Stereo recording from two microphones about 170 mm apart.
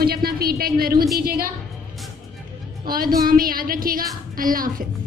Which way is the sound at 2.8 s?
60° right (ahead or behind).